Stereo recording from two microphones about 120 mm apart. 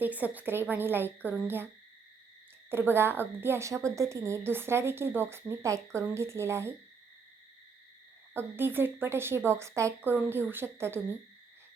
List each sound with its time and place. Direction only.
0.0 s a woman's voice: 15° right (ahead or behind)
2.6 s a woman's voice: 20° right (ahead or behind)
8.3 s a woman's voice: 20° right (ahead or behind)